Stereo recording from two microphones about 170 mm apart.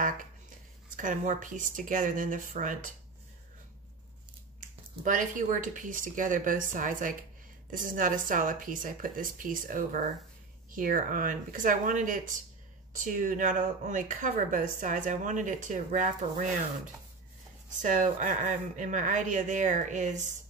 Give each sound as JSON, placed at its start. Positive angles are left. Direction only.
{"t": 0.9, "sound": "speech", "side_deg": -50}
{"t": 4.6, "sound": "speech", "side_deg": -50}